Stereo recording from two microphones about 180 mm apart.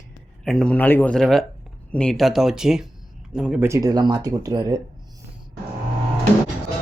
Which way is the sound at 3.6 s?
20° right (ahead or behind).